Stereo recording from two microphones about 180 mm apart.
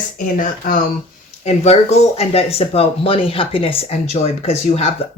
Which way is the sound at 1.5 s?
35° left (ahead or behind).